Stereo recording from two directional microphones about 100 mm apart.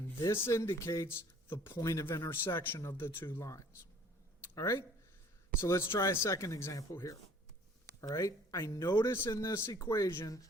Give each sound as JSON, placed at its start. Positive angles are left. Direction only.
{"t": 0.2, "sound": "speech", "side_deg": 25}